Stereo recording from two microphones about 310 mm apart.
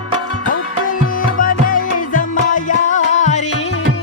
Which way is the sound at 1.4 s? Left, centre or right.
Left.